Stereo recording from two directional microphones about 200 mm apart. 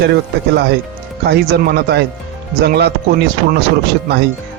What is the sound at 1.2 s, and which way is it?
Speech, 55° right (ahead or behind).